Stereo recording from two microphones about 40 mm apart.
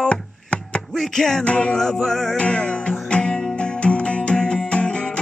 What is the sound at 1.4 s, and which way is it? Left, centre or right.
Music, left.